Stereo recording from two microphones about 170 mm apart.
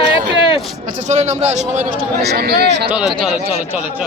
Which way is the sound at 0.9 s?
45° right (ahead or behind).